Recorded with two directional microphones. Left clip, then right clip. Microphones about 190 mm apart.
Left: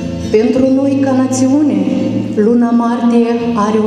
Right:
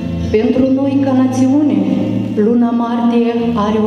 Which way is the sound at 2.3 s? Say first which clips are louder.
Left 2 dB; 30° left (ahead or behind).